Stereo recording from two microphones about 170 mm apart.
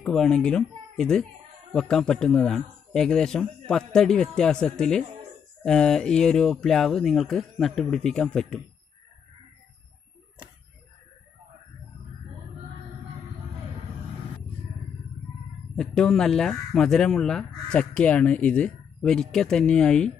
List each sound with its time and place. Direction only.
0.0 s speech: centre (ahead or behind)
15.7 s speech: 5° left (ahead or behind)